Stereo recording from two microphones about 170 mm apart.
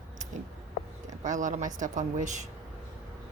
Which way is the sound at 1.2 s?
45° right (ahead or behind).